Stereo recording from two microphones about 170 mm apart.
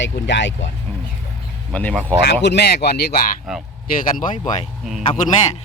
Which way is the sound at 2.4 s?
80° left.